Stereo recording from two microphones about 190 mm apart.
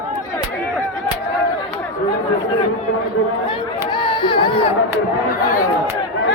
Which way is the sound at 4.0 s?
25° left (ahead or behind).